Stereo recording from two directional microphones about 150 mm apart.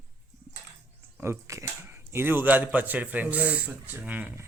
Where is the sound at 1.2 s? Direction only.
20° right (ahead or behind).